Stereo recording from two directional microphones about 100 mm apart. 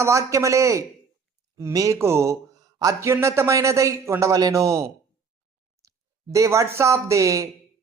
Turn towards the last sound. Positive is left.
turn(degrees=-30)  # may be behind; listen again after turning